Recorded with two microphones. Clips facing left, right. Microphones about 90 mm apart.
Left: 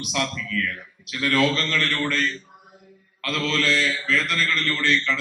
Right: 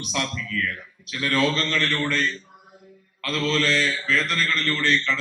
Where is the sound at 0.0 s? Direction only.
35° right (ahead or behind).